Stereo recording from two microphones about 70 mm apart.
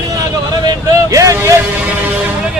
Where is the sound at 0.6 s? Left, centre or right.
Right.